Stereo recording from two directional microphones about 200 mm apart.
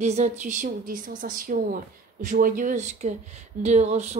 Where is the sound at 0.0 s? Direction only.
35° right (ahead or behind).